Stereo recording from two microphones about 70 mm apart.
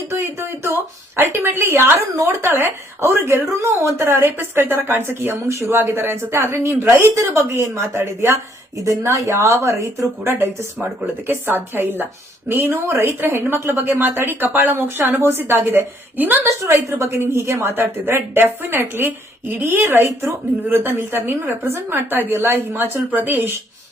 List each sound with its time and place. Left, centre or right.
0.1 s a woman's voice: right
16.4 s a woman's voice: right